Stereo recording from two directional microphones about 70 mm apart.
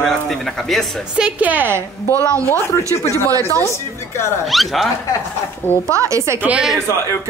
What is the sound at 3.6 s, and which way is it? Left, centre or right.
Speech, left.